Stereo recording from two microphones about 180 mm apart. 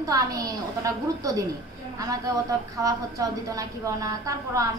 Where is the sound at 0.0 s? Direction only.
20° right (ahead or behind).